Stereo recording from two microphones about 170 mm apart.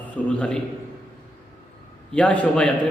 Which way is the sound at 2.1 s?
5° left (ahead or behind).